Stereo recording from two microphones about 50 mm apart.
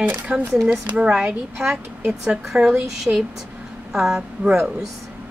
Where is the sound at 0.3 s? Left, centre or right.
Right.